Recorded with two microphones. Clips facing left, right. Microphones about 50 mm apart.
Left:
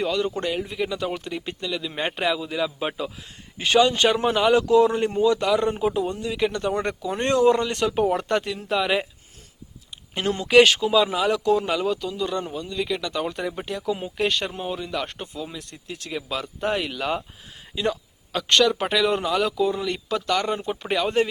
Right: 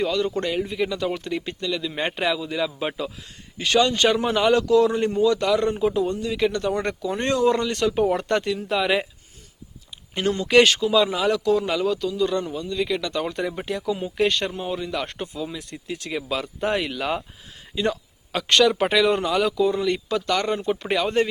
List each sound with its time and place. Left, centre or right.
0.0 s speech: centre
3.6 s speech: centre
7.1 s speech: left
7.9 s speech: centre
10.5 s speech: centre
11.4 s speech: centre